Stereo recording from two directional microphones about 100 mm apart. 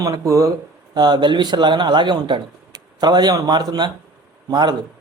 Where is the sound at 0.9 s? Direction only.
45° right (ahead or behind).